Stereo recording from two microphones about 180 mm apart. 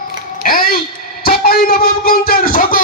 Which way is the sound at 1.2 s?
55° left (ahead or behind).